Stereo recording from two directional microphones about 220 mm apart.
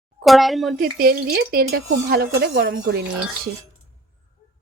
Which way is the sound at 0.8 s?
40° right (ahead or behind).